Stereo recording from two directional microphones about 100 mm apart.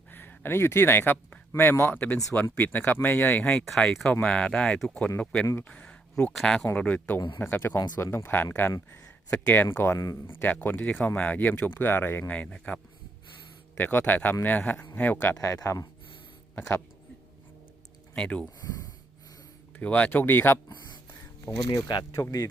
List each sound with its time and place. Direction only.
0.1 s speech: 20° left (ahead or behind); by 15.9 s 35° left (ahead or behind)
16.6 s speech: 20° left (ahead or behind)
18.1 s speech: 10° left (ahead or behind)
18.6 s gasp: 35° left (ahead or behind)
19.7 s speech: 15° left (ahead or behind)
21.4 s speech: 35° left (ahead or behind)